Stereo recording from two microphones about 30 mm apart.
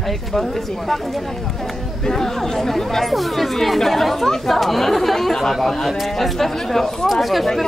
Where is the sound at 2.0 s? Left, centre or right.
Centre.